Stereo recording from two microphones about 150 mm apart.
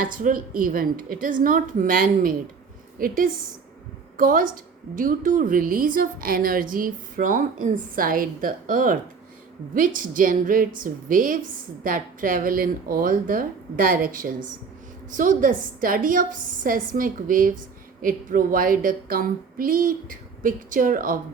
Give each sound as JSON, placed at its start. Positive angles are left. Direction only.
{"t": 0.0, "sound": "a woman's voice", "side_deg": -65}